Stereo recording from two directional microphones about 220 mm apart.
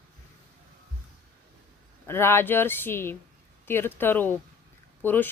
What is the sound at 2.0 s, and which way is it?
Speech, 10° left (ahead or behind).